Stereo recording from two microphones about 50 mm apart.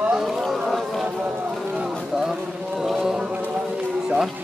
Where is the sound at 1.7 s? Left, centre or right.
Centre.